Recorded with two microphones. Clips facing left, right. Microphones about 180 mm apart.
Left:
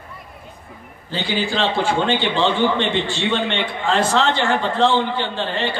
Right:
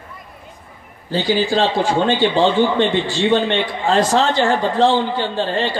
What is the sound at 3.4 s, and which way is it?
Speech, 35° right (ahead or behind).